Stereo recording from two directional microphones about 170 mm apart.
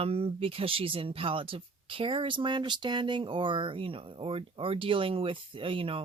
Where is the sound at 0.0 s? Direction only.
35° right (ahead or behind).